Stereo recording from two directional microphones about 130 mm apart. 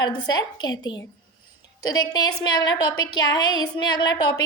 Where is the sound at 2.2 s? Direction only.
30° left (ahead or behind).